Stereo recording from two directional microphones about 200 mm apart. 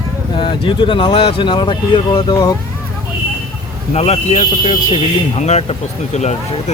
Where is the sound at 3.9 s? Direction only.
30° left (ahead or behind).